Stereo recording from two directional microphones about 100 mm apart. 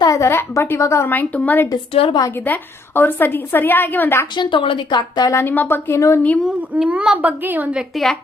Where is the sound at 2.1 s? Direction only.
45° left (ahead or behind).